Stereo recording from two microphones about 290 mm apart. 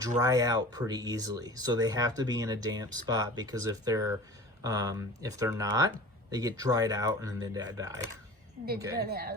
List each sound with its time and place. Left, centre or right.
0.2 s speech: centre
9.0 s a woman's voice: right